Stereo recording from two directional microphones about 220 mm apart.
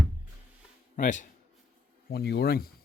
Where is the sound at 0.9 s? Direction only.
35° left (ahead or behind).